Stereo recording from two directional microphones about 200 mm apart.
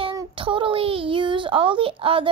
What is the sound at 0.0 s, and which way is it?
A woman's voice, 25° right (ahead or behind).